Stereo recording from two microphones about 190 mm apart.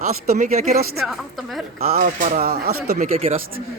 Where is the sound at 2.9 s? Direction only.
35° right (ahead or behind).